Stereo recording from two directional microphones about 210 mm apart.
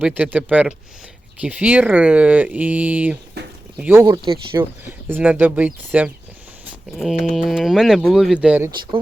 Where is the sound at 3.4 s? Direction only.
50° right (ahead or behind).